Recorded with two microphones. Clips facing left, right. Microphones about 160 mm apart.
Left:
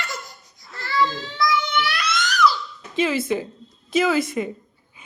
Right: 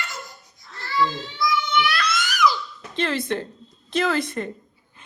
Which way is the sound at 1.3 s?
90° left.